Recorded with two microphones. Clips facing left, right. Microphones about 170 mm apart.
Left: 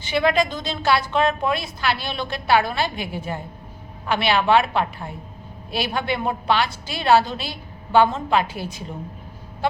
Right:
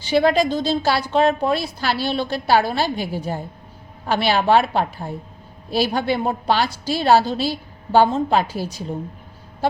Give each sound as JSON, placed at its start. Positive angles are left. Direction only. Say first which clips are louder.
{"t": 0.0, "sound": "a woman's voice", "louder": "right 3 dB", "side_deg": -35}